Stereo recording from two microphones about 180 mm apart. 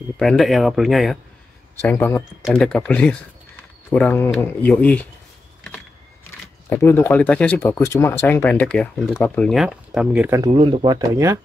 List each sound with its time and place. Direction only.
0.2 s speech: centre (ahead or behind)
1.8 s speech: 10° left (ahead or behind)
2.4 s speech: centre (ahead or behind)
6.7 s speech: 15° left (ahead or behind); by 10.3 s 5° right (ahead or behind)
10.3 s speech: 25° right (ahead or behind)